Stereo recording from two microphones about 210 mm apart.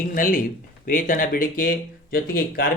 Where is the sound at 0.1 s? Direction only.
40° left (ahead or behind).